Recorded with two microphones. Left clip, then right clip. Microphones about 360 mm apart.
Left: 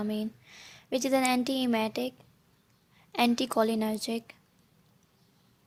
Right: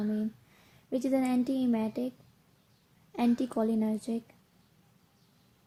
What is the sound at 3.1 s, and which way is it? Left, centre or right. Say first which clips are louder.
A woman's voice: left 4 dB; left.